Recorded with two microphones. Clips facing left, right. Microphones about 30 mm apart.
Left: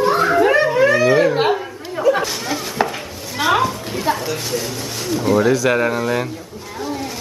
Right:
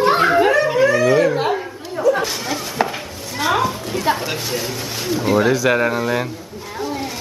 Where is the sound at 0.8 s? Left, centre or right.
Left.